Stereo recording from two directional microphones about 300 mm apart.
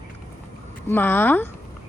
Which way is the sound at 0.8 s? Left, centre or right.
Centre.